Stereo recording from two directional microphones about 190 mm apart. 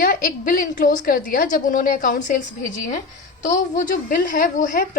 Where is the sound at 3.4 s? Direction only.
40° left (ahead or behind).